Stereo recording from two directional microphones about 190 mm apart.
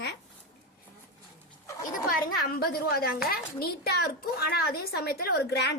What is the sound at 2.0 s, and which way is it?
A woman's voice, 50° left (ahead or behind).